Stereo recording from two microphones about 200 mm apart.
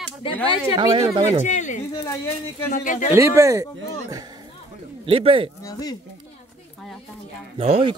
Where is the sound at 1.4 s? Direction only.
40° left (ahead or behind).